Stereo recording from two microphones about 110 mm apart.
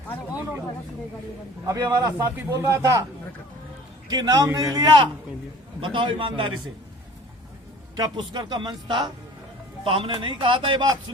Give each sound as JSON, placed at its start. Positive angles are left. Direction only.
{"t": 1.6, "sound": "a man's voice", "side_deg": -30}
{"t": 4.1, "sound": "a man's voice", "side_deg": -35}
{"t": 7.9, "sound": "a man's voice", "side_deg": -40}
{"t": 9.8, "sound": "speech", "side_deg": -55}